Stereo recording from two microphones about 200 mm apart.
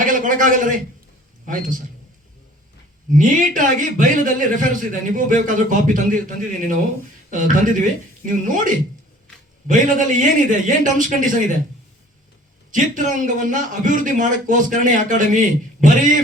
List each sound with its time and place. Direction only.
0.0 s a sound: 40° right (ahead or behind)
1.5 s a man's voice: 40° right (ahead or behind)
3.1 s a man's voice: 40° right (ahead or behind)
12.7 s a man's voice: 40° right (ahead or behind)